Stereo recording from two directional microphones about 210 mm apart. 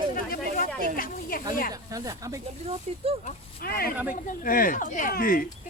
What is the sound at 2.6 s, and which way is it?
Speech, 30° right (ahead or behind).